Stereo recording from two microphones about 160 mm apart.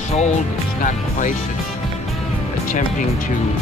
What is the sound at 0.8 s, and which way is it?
Speech, 50° left (ahead or behind).